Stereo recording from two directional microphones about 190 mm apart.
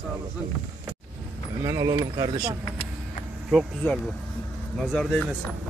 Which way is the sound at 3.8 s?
5° left (ahead or behind).